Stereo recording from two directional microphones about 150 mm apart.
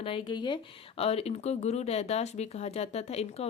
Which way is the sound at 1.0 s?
40° left (ahead or behind).